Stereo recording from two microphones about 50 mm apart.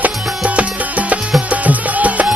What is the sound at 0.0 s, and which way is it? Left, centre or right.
Music, right.